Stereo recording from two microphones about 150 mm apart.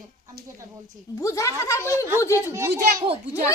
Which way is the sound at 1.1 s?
20° left (ahead or behind).